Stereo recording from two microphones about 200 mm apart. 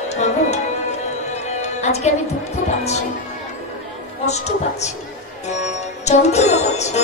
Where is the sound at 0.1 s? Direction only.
35° left (ahead or behind).